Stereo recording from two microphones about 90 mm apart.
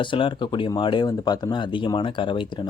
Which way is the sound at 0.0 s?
65° left (ahead or behind).